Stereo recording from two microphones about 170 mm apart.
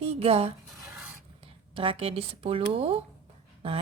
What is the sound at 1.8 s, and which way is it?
A woman's voice, 35° right (ahead or behind).